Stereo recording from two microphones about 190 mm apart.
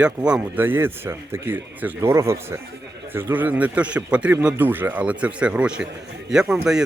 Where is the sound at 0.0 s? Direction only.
5° right (ahead or behind).